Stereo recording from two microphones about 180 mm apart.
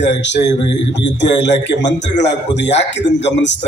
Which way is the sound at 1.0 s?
80° left.